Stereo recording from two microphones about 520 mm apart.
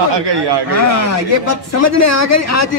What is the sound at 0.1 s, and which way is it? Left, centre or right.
Speech, right.